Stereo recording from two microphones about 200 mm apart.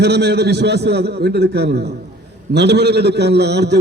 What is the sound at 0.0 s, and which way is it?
A man's voice, 55° right (ahead or behind).